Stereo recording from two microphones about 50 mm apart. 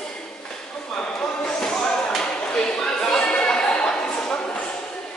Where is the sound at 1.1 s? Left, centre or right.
Centre.